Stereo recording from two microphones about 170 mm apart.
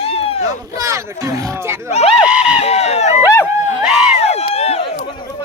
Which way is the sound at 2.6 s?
40° left (ahead or behind).